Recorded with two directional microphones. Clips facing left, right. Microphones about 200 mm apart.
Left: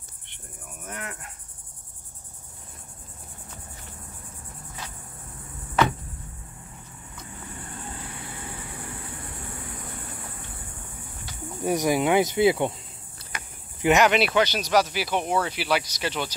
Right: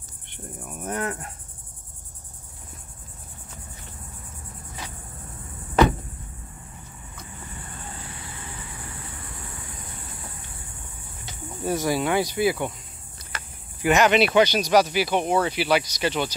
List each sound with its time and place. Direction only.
0.8 s insect: 40° right (ahead or behind)
11.6 s cricket: 15° left (ahead or behind)
13.3 s speech: 15° left (ahead or behind)